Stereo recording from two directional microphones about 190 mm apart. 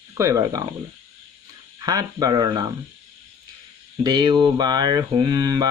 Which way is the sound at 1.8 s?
20° right (ahead or behind).